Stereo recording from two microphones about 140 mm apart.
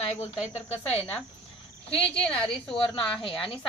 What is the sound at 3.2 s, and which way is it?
Speech, 40° left (ahead or behind).